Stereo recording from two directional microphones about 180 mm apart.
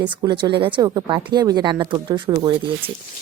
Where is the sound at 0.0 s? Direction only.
25° right (ahead or behind).